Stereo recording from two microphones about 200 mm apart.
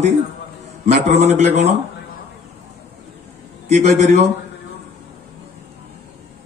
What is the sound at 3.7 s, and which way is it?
Speech, 35° right (ahead or behind).